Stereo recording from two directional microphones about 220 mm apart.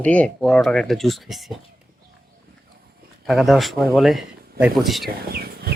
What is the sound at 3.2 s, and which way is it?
Speech, centre (ahead or behind).